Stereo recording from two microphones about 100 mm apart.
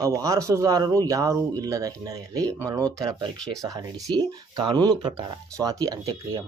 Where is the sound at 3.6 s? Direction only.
35° right (ahead or behind).